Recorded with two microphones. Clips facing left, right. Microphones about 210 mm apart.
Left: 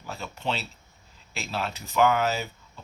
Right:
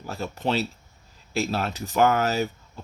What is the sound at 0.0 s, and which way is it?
Speech, 45° right (ahead or behind).